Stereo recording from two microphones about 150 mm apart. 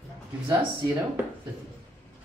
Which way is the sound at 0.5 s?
15° right (ahead or behind).